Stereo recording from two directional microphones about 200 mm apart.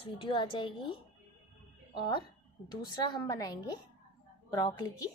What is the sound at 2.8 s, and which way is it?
Speech, 20° left (ahead or behind).